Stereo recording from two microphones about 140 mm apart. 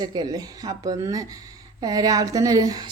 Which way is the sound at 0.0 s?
30° right (ahead or behind).